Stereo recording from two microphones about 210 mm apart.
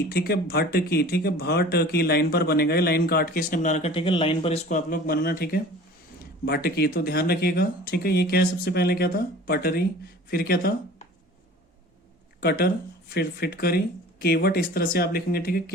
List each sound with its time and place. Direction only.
0.1 s speech: 45° left (ahead or behind)
12.4 s speech: 50° left (ahead or behind)